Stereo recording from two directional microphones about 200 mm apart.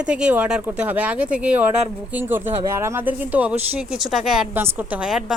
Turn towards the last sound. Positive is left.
turn(degrees=-5)  # may be behind; listen again after turning